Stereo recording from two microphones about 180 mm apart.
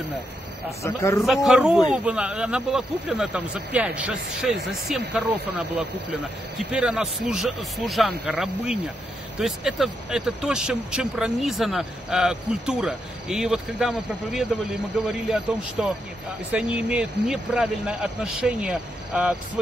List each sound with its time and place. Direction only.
0.8 s a man's voice: 15° left (ahead or behind)
1.2 s speech: centre (ahead or behind)